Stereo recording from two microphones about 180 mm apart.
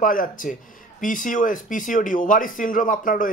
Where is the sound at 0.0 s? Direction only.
50° left (ahead or behind).